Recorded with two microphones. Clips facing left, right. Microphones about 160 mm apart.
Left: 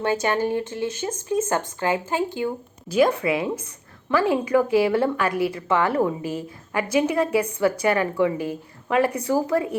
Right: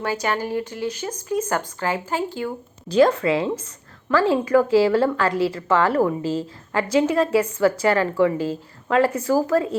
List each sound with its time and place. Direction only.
0.0 s a woman's voice: 25° left (ahead or behind)